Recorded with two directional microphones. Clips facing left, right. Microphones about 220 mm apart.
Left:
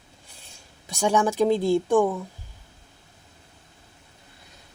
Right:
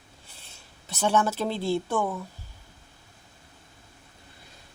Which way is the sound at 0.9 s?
15° left (ahead or behind).